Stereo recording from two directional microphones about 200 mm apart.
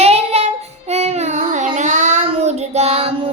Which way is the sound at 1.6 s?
35° right (ahead or behind).